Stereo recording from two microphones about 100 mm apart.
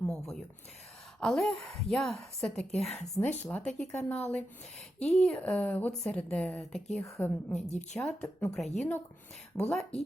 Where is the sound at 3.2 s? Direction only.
20° left (ahead or behind).